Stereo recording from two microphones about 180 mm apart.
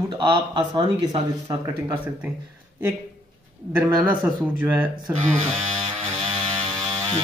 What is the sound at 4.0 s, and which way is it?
Speech, 10° right (ahead or behind).